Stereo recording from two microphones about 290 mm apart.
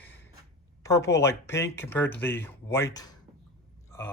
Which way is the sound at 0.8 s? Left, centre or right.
Centre.